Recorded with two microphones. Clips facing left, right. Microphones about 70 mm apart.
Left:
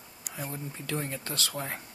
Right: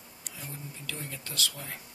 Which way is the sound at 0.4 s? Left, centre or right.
Left.